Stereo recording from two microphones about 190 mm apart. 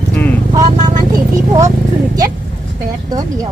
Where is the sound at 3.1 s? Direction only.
20° right (ahead or behind).